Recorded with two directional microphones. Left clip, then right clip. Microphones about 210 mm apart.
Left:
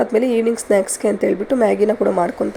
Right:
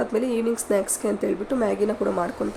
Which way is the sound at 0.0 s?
25° left (ahead or behind).